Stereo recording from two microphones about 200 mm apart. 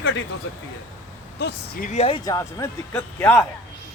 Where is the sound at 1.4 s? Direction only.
55° left (ahead or behind).